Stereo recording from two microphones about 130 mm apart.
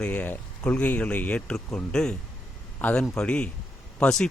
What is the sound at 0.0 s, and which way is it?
Speech, 10° left (ahead or behind).